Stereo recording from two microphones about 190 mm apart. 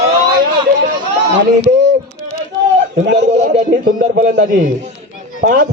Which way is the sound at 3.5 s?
45° right (ahead or behind).